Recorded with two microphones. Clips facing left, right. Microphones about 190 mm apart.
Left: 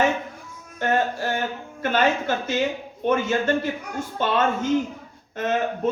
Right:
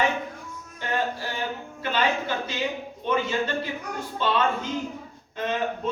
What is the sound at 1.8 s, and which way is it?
A man's voice, 45° left (ahead or behind).